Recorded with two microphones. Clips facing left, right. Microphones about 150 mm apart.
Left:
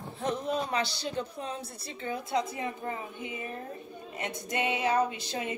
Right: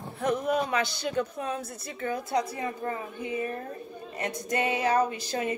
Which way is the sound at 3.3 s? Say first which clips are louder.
Right 9 dB; 45° right (ahead or behind).